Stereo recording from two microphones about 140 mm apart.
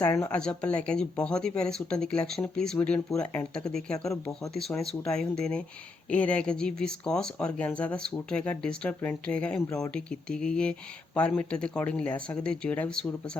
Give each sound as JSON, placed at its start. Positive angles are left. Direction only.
{"t": 0.1, "sound": "a woman's voice", "side_deg": 20}
{"t": 0.3, "sound": "speech", "side_deg": 5}